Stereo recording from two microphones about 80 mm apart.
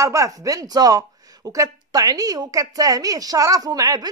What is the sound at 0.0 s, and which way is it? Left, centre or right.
Speech, right.